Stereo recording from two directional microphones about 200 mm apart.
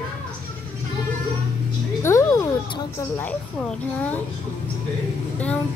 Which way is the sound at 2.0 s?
15° left (ahead or behind).